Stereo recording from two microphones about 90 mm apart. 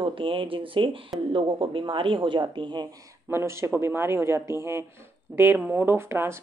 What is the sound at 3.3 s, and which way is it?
A man's voice, 30° right (ahead or behind).